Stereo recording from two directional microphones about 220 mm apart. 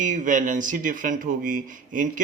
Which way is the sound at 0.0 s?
35° right (ahead or behind).